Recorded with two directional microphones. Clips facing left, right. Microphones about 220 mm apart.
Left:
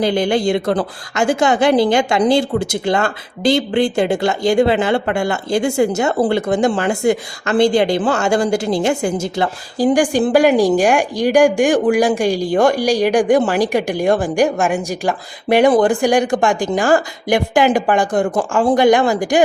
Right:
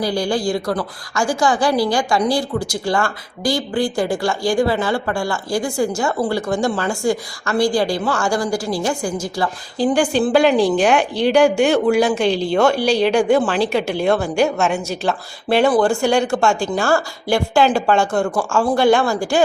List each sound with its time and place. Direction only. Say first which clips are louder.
0.0 s speech: left 4 dB; 20° left (ahead or behind)